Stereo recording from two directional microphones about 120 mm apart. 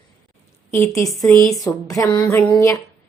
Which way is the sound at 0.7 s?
25° left (ahead or behind).